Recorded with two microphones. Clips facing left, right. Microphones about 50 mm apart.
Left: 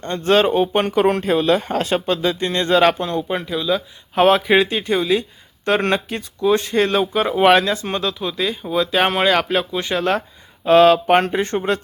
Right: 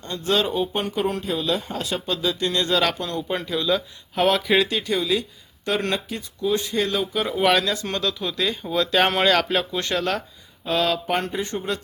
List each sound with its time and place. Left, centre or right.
0.0 s speech: left
3.2 s speech: centre
4.1 s speech: left
10.7 s speech: left